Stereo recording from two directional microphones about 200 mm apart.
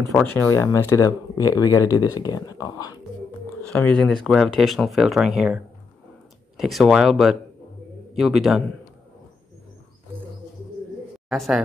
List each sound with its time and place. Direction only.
0.1 s speech: 10° left (ahead or behind)
3.6 s speech: 5° left (ahead or behind)
11.2 s a man's voice: centre (ahead or behind)